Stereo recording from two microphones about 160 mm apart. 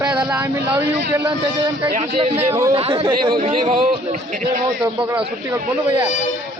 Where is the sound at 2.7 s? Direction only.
35° right (ahead or behind).